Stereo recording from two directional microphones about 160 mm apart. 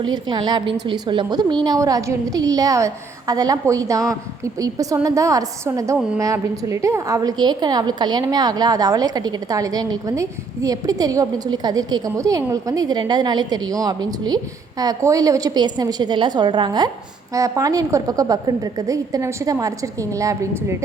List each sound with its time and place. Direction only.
0.0 s a woman's voice: 25° right (ahead or behind)